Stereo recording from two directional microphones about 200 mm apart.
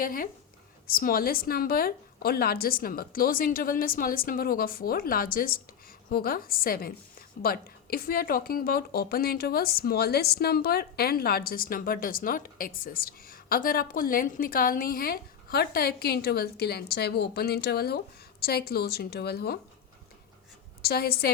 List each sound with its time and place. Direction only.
0.0 s a woman's voice: 45° left (ahead or behind)
20.8 s a woman's voice: 50° left (ahead or behind)